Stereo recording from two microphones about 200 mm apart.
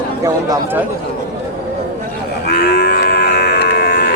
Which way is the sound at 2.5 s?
55° left (ahead or behind).